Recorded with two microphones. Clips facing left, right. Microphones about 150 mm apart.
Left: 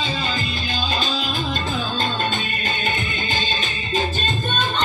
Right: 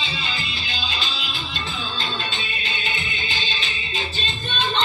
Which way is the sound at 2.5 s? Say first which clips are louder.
Left 5 dB; 45° left (ahead or behind).